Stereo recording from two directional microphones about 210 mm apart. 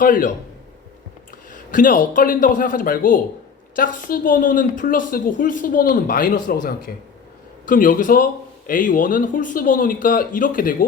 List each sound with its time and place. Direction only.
0.0 s speech: 40° left (ahead or behind)
1.5 s speech: 40° left (ahead or behind)